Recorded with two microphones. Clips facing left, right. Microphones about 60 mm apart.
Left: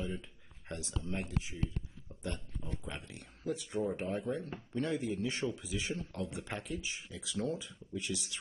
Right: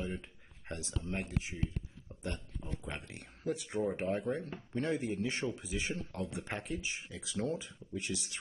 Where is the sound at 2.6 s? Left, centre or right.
Right.